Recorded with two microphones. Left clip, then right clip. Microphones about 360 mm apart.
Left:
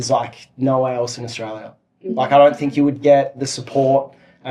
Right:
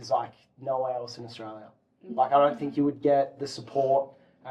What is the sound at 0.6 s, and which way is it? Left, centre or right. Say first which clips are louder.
Speech: left 11 dB; left.